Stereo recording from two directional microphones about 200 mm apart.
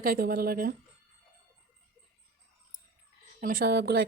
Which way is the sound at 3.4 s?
45° right (ahead or behind).